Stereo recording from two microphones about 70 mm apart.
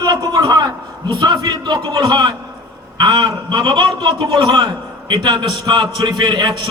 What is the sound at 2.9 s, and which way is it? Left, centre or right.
A man's voice, right.